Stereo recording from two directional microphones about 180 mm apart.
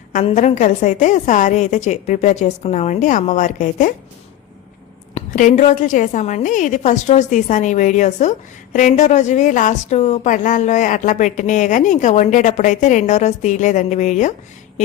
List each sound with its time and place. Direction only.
0.1 s a woman's voice: 40° left (ahead or behind)
5.4 s a woman's voice: 40° left (ahead or behind)